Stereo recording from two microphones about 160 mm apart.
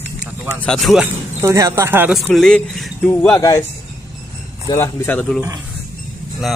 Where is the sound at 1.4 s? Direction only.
20° right (ahead or behind).